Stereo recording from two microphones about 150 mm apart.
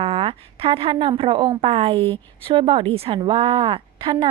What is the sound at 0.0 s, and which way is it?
A woman's voice, 35° right (ahead or behind).